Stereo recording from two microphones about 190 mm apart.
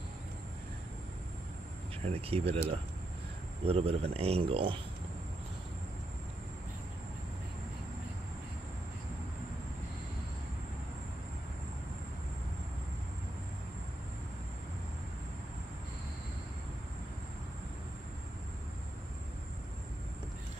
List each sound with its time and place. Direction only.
2.0 s a man's voice: 30° right (ahead or behind)
3.6 s a man's voice: 30° right (ahead or behind)